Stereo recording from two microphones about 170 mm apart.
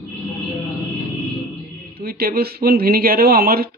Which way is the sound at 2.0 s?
60° right (ahead or behind).